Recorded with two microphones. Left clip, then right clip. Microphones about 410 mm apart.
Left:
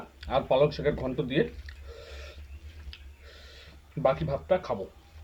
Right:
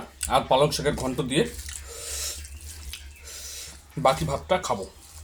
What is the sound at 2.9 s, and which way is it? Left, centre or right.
Drip, left.